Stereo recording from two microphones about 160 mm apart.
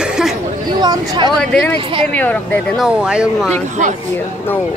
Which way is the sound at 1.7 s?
35° right (ahead or behind).